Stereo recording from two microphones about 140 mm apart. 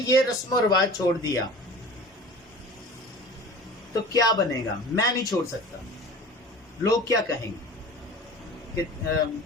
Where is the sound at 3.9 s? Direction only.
25° left (ahead or behind).